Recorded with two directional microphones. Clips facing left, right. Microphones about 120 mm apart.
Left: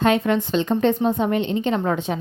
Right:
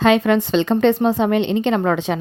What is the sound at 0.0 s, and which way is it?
A woman's voice, 90° right.